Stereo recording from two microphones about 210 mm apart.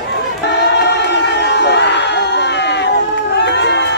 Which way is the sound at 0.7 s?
55° left (ahead or behind).